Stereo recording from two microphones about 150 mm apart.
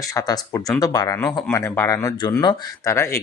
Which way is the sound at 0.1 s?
20° left (ahead or behind).